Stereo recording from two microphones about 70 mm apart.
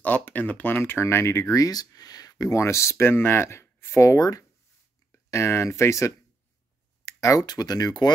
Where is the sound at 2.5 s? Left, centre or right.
Left.